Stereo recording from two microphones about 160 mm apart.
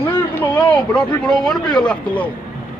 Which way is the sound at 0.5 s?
10° left (ahead or behind).